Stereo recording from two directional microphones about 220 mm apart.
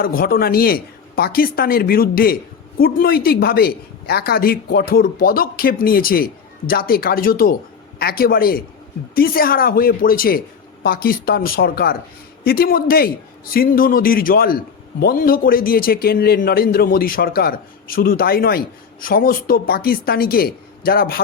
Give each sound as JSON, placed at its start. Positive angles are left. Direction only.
{"t": 0.0, "sound": "a woman's voice", "side_deg": 40}